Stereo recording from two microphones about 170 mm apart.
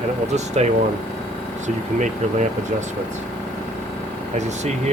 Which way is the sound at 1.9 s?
45° right (ahead or behind).